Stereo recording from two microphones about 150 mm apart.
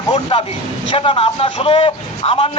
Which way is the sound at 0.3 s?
35° left (ahead or behind).